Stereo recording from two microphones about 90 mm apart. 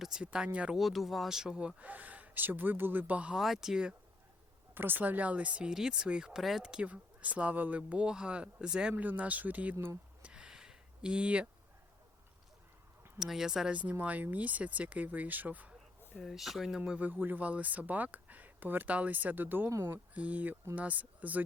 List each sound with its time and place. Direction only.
0.0 s speech: 10° right (ahead or behind)
0.8 s speech: centre (ahead or behind)
3.3 s speech: 5° right (ahead or behind)
4.7 s speech: 25° right (ahead or behind)
10.2 s a sound: 10° right (ahead or behind)
13.1 s speech: 5° right (ahead or behind)
13.7 s speech: 15° right (ahead or behind)
16.1 s speech: centre (ahead or behind)
17.1 s speech: 20° right (ahead or behind)